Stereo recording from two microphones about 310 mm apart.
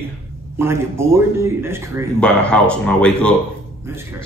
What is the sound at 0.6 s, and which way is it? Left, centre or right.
A man's voice, centre.